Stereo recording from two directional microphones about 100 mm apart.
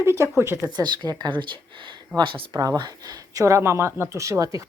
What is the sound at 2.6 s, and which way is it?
Speech, 40° right (ahead or behind).